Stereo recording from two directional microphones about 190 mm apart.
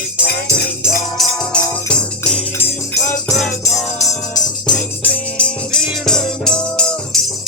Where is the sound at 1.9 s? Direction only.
5° left (ahead or behind).